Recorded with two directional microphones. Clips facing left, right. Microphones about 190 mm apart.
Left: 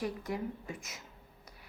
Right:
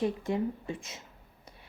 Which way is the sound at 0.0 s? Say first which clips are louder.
Right 6 dB; 25° right (ahead or behind).